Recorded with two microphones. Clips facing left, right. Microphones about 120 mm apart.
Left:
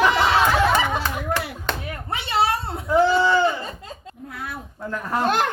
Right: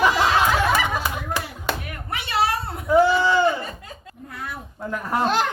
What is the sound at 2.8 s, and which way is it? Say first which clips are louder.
Sheep: right 2 dB; 5° right (ahead or behind).